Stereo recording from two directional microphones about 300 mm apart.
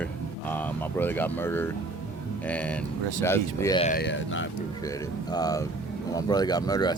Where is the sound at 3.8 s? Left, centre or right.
Left.